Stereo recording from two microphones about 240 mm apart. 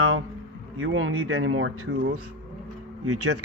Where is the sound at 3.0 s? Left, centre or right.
Right.